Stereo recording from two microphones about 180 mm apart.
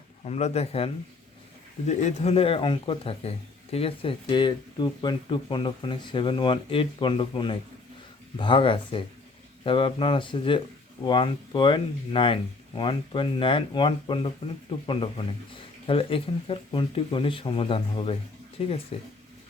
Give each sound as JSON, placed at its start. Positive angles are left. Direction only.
{"t": 0.3, "sound": "speech", "side_deg": 35}
{"t": 1.9, "sound": "speech", "side_deg": 40}